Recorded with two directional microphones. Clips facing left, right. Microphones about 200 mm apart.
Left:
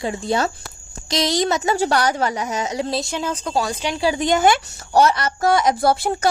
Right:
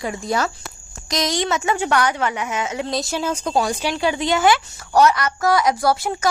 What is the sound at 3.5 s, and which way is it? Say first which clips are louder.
Speech: right 2 dB; 25° right (ahead or behind).